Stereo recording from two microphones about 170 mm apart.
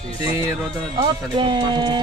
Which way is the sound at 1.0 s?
25° right (ahead or behind).